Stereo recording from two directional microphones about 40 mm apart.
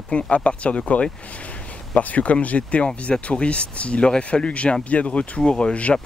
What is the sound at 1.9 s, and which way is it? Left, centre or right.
Speech, left.